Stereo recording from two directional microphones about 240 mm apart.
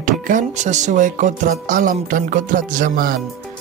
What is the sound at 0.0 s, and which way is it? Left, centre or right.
Music, right.